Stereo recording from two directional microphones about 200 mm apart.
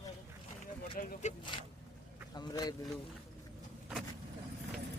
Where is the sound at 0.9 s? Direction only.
40° left (ahead or behind).